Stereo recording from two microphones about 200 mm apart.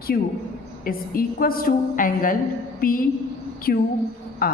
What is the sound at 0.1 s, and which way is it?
A woman's voice, 50° left (ahead or behind).